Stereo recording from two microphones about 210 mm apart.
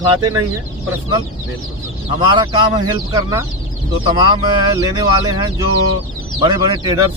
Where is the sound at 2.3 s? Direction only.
20° right (ahead or behind).